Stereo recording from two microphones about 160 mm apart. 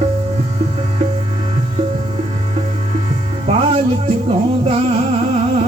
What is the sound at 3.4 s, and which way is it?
Music, 40° right (ahead or behind).